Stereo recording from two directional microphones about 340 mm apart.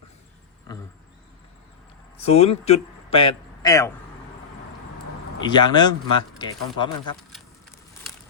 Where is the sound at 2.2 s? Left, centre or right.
Centre.